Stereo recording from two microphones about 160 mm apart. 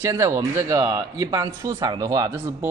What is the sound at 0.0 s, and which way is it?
Speech, 15° right (ahead or behind).